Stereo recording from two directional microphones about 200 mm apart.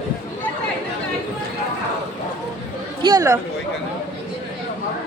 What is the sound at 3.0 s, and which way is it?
Speech, 15° right (ahead or behind).